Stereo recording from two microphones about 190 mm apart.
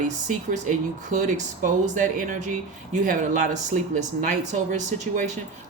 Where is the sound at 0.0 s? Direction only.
40° right (ahead or behind).